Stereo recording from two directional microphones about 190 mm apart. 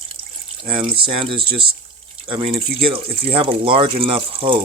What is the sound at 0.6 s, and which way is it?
Speech, 30° right (ahead or behind).